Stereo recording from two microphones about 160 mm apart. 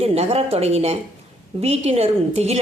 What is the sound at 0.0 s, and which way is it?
A woman's voice, 40° right (ahead or behind).